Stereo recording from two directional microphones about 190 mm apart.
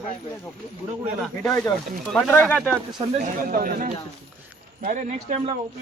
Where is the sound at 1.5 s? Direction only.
15° left (ahead or behind).